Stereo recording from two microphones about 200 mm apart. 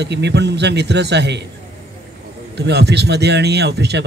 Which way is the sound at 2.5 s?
55° right (ahead or behind).